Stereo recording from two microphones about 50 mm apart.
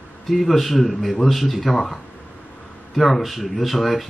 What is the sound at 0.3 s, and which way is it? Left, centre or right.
Speech, centre.